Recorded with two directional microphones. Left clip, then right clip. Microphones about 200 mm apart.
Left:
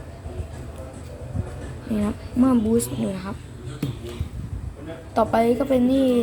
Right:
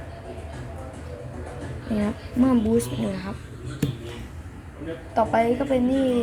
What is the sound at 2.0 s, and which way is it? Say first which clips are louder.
Speech: left 1 dB; 5° left (ahead or behind).